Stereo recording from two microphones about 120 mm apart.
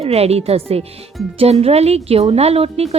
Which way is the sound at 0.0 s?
60° right (ahead or behind).